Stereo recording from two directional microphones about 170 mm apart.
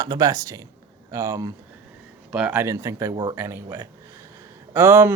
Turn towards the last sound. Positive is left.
turn(degrees=-15)  # may be behind; listen again after turning